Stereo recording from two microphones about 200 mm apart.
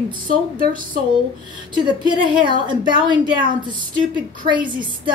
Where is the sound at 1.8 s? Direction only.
25° right (ahead or behind).